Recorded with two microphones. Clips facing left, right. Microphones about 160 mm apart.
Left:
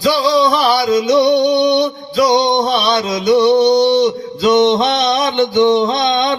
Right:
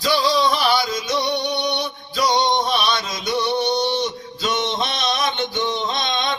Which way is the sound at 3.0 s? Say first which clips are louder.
Left 12 dB; 65° left (ahead or behind).